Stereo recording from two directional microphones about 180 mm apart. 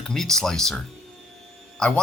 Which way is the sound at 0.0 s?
Centre (ahead or behind).